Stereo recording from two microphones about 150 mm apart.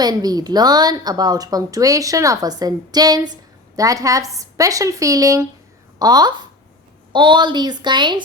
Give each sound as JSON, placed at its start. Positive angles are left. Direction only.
{"t": 0.0, "sound": "a woman's voice", "side_deg": -25}